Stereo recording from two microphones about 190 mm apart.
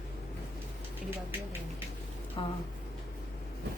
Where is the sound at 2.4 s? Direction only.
30° left (ahead or behind).